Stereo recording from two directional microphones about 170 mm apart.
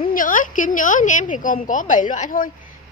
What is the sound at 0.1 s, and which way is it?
A woman's voice, 50° left (ahead or behind).